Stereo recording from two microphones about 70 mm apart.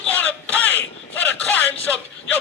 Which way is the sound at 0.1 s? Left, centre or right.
Left.